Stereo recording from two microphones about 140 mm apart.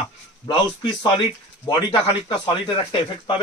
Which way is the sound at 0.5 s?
30° left (ahead or behind).